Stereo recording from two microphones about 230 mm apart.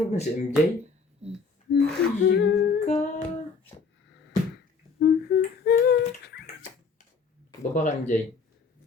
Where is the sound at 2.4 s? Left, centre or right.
Left.